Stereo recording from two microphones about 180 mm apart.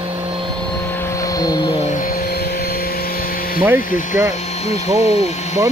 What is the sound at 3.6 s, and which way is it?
Speech, 15° right (ahead or behind).